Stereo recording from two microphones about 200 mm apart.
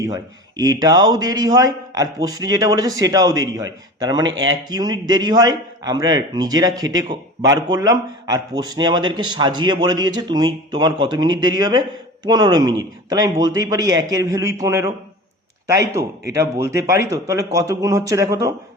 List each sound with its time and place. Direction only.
0.0 s a man's voice: 20° right (ahead or behind)